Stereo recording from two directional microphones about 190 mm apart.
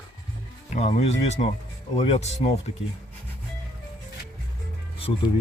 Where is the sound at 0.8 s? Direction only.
35° left (ahead or behind).